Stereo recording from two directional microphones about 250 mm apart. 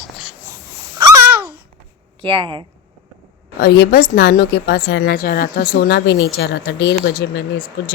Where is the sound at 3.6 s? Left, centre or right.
Left.